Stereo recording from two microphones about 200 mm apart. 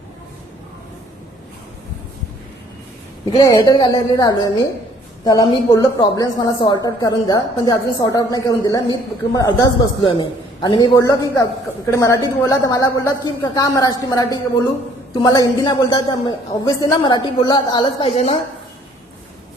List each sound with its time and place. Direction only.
3.2 s a man's voice: 25° left (ahead or behind)